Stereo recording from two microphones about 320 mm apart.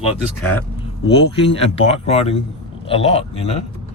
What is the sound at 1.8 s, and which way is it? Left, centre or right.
Speech, centre.